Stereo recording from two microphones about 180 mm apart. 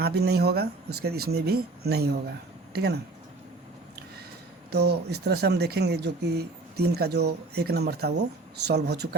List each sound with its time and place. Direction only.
0.0 s speech: 60° right (ahead or behind)
4.7 s speech: 65° right (ahead or behind)